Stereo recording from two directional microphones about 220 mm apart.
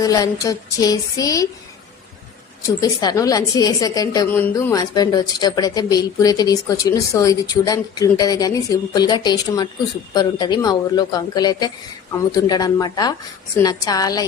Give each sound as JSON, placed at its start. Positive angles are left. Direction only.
{"t": 0.0, "sound": "a woman's voice", "side_deg": 15}
{"t": 2.6, "sound": "a woman's voice", "side_deg": 15}